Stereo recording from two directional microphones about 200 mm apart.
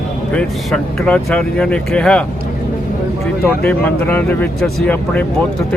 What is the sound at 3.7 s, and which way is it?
Speech, 10° left (ahead or behind).